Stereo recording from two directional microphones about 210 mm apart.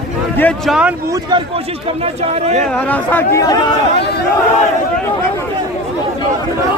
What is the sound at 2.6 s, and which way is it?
Speech, 5° left (ahead or behind).